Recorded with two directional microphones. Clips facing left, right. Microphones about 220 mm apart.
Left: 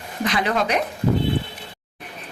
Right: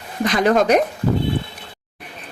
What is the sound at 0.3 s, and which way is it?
Speech, 45° right (ahead or behind).